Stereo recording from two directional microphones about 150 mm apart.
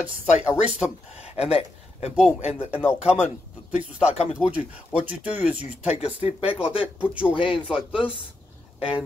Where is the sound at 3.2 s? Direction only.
10° right (ahead or behind).